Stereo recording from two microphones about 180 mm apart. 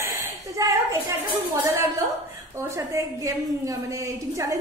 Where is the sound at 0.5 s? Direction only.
20° right (ahead or behind).